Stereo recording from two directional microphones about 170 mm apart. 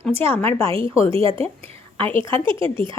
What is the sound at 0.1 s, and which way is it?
Speech, 15° left (ahead or behind).